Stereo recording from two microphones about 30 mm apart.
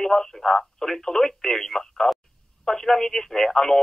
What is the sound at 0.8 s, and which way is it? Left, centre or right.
Speech, centre.